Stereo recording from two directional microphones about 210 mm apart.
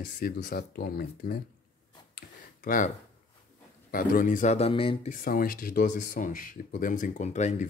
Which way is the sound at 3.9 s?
40° left (ahead or behind).